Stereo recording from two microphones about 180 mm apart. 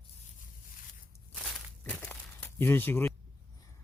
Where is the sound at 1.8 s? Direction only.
5° left (ahead or behind).